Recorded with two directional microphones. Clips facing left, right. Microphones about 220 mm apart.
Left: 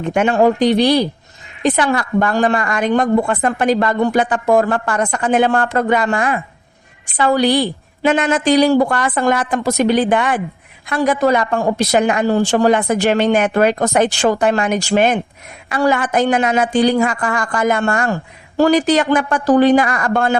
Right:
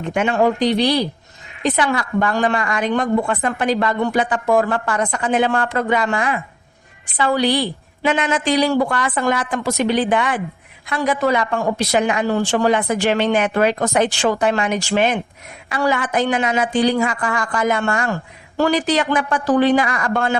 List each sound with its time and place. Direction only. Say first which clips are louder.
0.1 s a woman's voice: left 4 dB; 45° left (ahead or behind)